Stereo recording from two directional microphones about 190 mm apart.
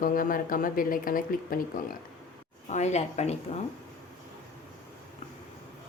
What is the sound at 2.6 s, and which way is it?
Speech, 35° left (ahead or behind).